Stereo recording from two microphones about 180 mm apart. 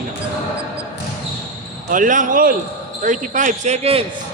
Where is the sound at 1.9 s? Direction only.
45° right (ahead or behind).